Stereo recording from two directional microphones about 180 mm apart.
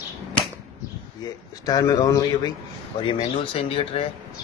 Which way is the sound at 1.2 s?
20° left (ahead or behind).